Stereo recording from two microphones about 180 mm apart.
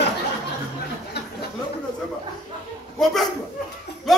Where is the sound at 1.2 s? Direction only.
65° left (ahead or behind).